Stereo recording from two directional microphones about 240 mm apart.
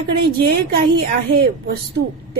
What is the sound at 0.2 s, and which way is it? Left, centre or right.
Speech, right.